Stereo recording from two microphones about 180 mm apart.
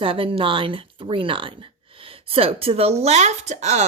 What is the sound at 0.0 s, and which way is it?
Speech, 30° right (ahead or behind).